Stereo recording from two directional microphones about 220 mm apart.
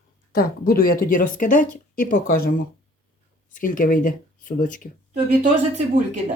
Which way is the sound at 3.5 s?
40° left (ahead or behind).